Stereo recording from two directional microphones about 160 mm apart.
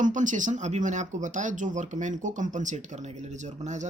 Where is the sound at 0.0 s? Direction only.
50° right (ahead or behind).